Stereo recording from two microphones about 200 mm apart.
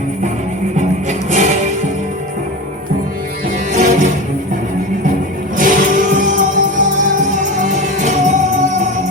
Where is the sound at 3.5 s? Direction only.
40° right (ahead or behind).